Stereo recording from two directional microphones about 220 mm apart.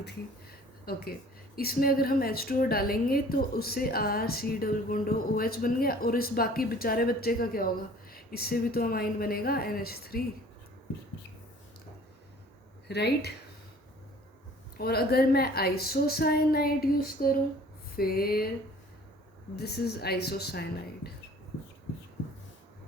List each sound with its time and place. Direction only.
0.9 s a woman's voice: 45° left (ahead or behind)
12.9 s a woman's voice: 50° left (ahead or behind)
14.8 s a woman's voice: 45° left (ahead or behind)
19.5 s a woman's voice: 45° left (ahead or behind)